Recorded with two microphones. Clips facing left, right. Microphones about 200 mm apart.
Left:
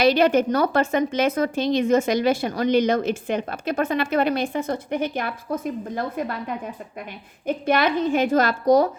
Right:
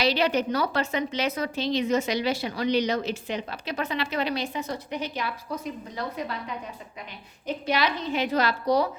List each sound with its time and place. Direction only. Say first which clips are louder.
0.0 s a woman's voice: left 7 dB; 50° left (ahead or behind)
7.4 s a woman's voice: left 5 dB; 50° left (ahead or behind)